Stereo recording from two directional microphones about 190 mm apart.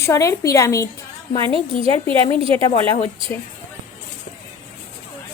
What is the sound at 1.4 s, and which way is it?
Speech, 30° right (ahead or behind).